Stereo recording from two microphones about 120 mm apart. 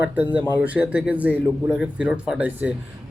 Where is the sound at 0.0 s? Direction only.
15° right (ahead or behind).